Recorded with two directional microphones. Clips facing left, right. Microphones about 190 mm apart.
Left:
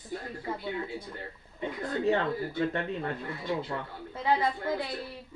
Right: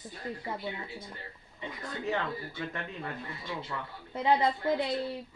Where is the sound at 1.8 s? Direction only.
35° left (ahead or behind).